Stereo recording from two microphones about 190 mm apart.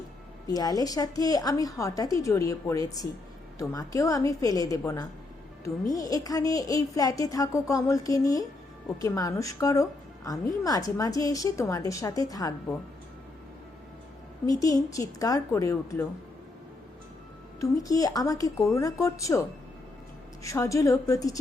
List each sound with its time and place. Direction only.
0.4 s speech: 20° left (ahead or behind)
14.4 s speech: 20° left (ahead or behind)
17.6 s speech: 20° left (ahead or behind)
20.4 s speech: 15° left (ahead or behind)